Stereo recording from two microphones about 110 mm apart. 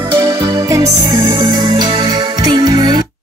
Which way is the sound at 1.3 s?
45° right (ahead or behind).